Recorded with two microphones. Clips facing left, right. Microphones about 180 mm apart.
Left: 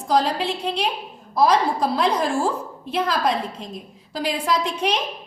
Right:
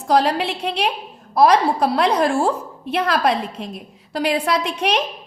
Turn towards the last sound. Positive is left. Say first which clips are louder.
# right 2 dB
turn(degrees=-70)  # may be behind; listen again after turning